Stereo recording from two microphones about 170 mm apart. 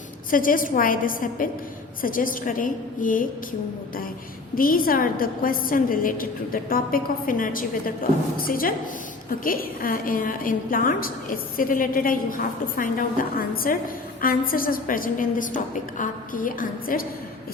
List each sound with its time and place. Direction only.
0.3 s a woman's voice: 55° left (ahead or behind)
4.5 s a woman's voice: 55° left (ahead or behind)